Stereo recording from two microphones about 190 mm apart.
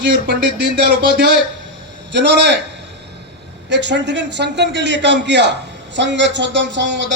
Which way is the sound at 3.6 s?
65° right (ahead or behind).